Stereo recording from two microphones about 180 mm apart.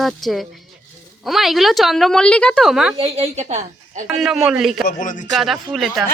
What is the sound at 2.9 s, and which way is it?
A woman's voice, 30° right (ahead or behind).